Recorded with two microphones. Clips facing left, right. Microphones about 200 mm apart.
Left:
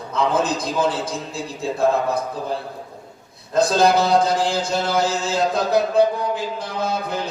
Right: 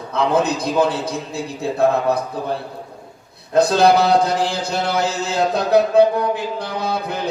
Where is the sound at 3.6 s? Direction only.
60° right (ahead or behind).